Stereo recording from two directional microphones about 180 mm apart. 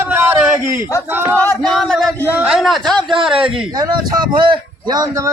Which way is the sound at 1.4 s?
5° left (ahead or behind).